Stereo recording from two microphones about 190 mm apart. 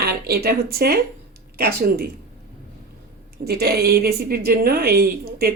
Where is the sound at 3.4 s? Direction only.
55° right (ahead or behind).